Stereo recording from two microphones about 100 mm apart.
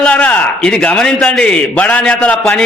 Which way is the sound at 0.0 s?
15° left (ahead or behind).